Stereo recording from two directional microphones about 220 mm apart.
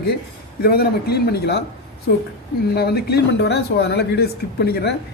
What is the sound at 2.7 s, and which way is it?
Speech, 45° left (ahead or behind).